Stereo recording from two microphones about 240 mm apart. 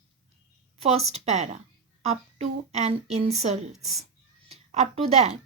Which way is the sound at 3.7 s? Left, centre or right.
Centre.